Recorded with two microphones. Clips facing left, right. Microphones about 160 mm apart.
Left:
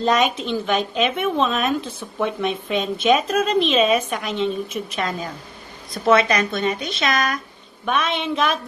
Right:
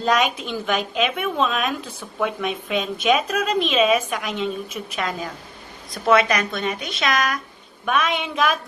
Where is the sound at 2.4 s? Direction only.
5° right (ahead or behind).